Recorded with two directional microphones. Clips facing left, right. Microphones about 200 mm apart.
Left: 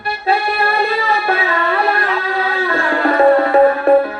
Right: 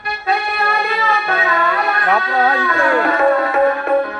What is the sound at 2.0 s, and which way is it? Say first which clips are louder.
Music: right 3 dB; 55° right (ahead or behind).